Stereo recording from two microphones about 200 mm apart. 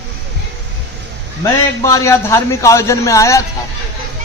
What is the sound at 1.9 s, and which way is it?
A man's voice, 15° left (ahead or behind).